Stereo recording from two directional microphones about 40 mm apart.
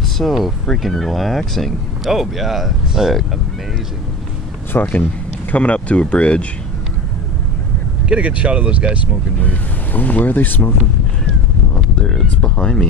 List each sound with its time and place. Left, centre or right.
0.2 s speech: centre
2.0 s speech: centre
4.7 s speech: left
5.5 s speech: left
8.1 s speech: right
9.9 s speech: left
12.4 s speech: left